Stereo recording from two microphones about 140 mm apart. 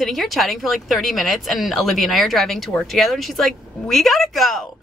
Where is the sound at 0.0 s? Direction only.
Centre (ahead or behind).